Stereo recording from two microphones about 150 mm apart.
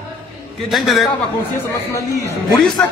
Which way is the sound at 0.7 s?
Centre (ahead or behind).